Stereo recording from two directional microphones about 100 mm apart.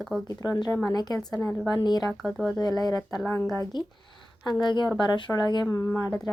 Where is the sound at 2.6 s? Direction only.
40° left (ahead or behind).